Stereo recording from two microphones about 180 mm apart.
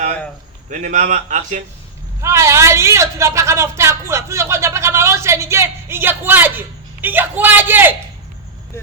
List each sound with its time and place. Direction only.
0.7 s speech: 45° right (ahead or behind)
2.2 s speech: 15° right (ahead or behind)